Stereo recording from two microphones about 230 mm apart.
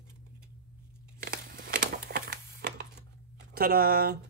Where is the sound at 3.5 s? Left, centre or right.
Right.